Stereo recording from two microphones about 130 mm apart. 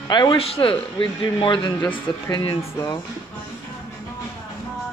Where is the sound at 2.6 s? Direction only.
25° left (ahead or behind).